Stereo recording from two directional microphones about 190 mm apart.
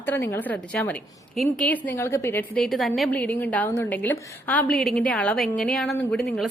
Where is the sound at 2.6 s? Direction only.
Centre (ahead or behind).